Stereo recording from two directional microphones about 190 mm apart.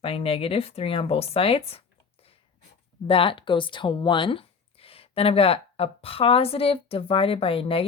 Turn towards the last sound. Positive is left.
turn(degrees=30)  # may be behind; listen again after turning